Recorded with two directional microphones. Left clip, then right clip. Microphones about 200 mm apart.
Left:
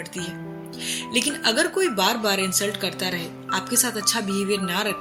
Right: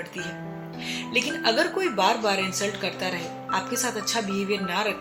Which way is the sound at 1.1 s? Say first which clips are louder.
Left 1 dB; 50° left (ahead or behind).